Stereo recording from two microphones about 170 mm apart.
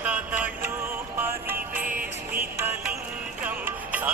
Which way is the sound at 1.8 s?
55° right (ahead or behind).